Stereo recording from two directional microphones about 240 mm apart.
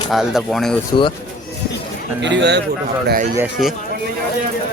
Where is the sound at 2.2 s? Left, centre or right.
Right.